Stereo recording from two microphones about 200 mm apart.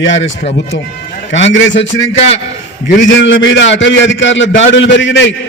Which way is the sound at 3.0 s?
65° left (ahead or behind).